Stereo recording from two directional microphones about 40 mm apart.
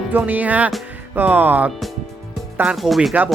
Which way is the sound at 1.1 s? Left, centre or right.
Right.